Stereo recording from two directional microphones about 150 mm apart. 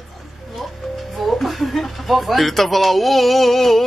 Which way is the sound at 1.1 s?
Centre (ahead or behind).